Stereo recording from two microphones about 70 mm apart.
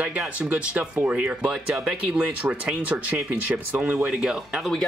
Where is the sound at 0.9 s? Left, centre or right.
Centre.